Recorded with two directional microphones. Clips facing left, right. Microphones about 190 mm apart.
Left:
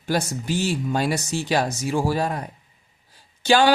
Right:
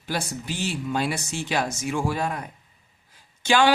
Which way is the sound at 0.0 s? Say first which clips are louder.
Left 5 dB; 45° left (ahead or behind).